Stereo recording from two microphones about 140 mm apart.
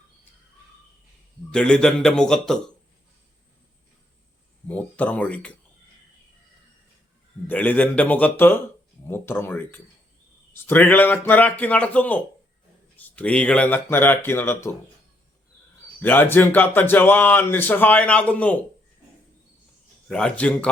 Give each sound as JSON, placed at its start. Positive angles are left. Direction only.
{"t": 1.5, "sound": "a man's voice", "side_deg": 5}
{"t": 4.7, "sound": "speech", "side_deg": 10}
{"t": 7.4, "sound": "speech", "side_deg": 10}
{"t": 16.0, "sound": "speech", "side_deg": 15}
{"t": 20.1, "sound": "speech", "side_deg": 5}